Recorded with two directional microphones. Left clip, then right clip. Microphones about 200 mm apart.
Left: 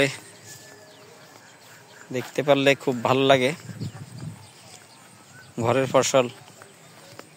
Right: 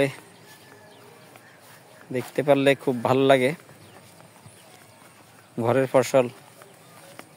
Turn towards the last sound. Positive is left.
turn(degrees=-10)  # may be behind; listen again after turning